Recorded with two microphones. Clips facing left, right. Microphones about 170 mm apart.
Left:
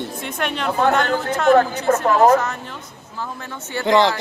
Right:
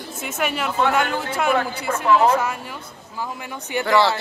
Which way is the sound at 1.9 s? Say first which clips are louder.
Left 3 dB; 45° left (ahead or behind).